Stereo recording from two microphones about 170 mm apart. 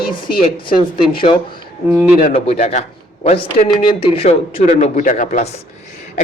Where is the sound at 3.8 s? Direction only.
30° left (ahead or behind).